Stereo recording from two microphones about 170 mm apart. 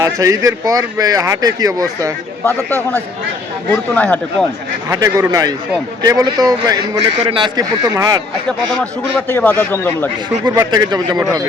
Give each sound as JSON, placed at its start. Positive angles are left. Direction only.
{"t": 0.2, "sound": "speech", "side_deg": -20}
{"t": 2.4, "sound": "a man's voice", "side_deg": 10}
{"t": 4.9, "sound": "speech", "side_deg": -20}
{"t": 8.7, "sound": "a man's voice", "side_deg": 5}
{"t": 10.7, "sound": "speech", "side_deg": -25}